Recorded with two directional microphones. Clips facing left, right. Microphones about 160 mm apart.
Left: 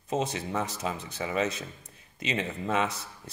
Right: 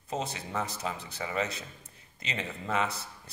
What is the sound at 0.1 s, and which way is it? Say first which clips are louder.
Speech: left 5 dB; 20° left (ahead or behind).